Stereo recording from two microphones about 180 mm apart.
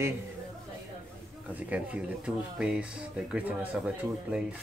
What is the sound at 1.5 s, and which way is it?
Speech, 10° right (ahead or behind).